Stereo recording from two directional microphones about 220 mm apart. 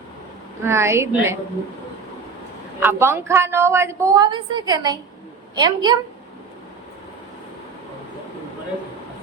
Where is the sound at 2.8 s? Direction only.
10° right (ahead or behind).